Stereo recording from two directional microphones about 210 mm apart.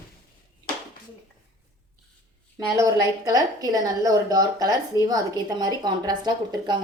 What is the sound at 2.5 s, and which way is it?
A woman's voice, 15° right (ahead or behind).